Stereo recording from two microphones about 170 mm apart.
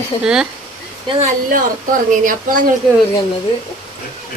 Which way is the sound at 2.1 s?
50° right (ahead or behind).